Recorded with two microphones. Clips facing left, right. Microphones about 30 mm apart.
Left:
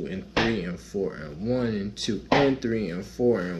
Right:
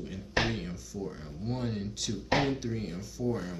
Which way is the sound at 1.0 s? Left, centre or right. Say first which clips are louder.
Left 10 dB; left.